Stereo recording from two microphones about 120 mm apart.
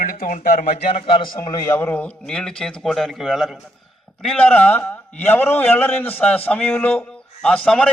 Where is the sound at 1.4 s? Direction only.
25° left (ahead or behind).